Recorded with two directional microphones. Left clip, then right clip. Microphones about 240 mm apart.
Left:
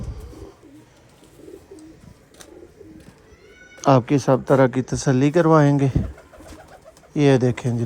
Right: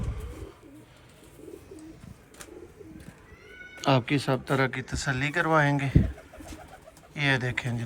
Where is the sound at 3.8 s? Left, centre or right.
Left.